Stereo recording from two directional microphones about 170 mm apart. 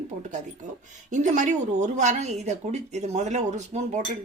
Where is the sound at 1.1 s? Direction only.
45° right (ahead or behind).